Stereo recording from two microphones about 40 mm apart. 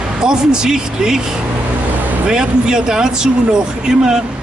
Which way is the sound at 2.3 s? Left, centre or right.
Centre.